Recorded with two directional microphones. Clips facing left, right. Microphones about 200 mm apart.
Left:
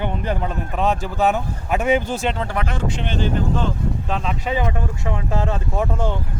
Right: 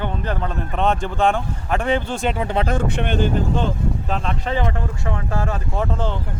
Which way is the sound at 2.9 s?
55° right (ahead or behind).